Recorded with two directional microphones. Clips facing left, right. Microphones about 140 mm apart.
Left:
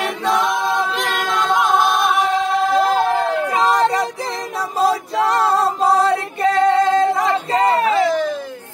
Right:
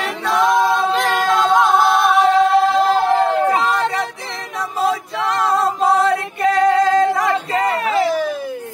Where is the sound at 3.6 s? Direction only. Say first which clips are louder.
Left 3 dB; 40° left (ahead or behind).